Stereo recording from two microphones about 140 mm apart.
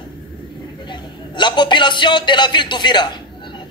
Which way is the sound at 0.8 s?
35° left (ahead or behind).